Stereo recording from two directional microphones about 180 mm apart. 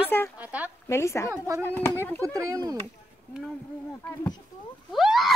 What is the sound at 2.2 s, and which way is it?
Speech, 20° right (ahead or behind).